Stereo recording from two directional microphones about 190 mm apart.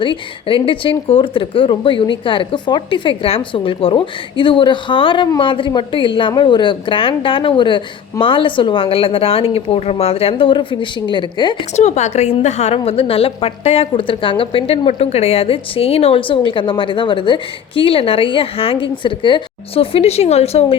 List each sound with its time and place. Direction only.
0.0 s a woman's voice: 25° left (ahead or behind)
11.8 s a woman's voice: 35° left (ahead or behind)